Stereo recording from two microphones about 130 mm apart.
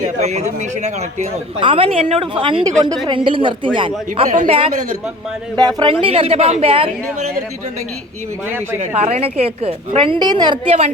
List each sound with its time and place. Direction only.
0.0 s speech: 60° right (ahead or behind)
5.5 s speech: 30° right (ahead or behind)
5.9 s speech: 45° right (ahead or behind)
9.0 s speech: 50° right (ahead or behind); by 10.8 s 35° right (ahead or behind)